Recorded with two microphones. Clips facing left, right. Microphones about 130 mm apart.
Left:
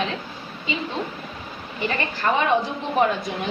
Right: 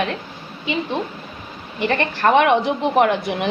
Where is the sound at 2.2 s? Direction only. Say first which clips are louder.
Right 6 dB; 70° right (ahead or behind).